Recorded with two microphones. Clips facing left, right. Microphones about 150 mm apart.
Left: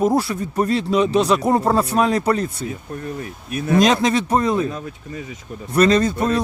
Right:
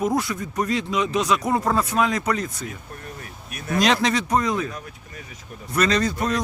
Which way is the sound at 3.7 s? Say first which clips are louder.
Left 4 dB; 20° left (ahead or behind).